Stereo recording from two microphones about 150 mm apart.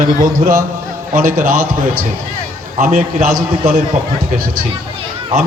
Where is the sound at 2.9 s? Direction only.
65° right (ahead or behind).